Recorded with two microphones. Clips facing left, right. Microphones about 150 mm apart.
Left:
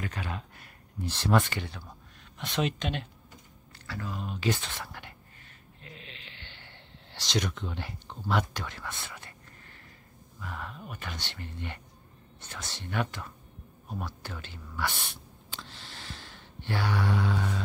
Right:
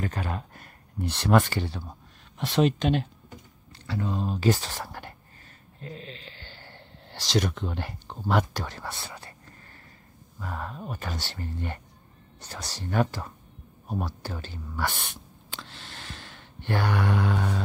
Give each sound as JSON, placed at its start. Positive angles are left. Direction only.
{"t": 0.0, "sound": "speech", "side_deg": -45}
{"t": 1.0, "sound": "speech", "side_deg": -65}
{"t": 1.4, "sound": "speech", "side_deg": -35}
{"t": 3.8, "sound": "speech", "side_deg": -25}
{"t": 5.8, "sound": "a sound", "side_deg": -35}
{"t": 8.3, "sound": "speech", "side_deg": -45}
{"t": 10.4, "sound": "speech", "side_deg": -40}
{"t": 15.5, "sound": "a sound", "side_deg": -70}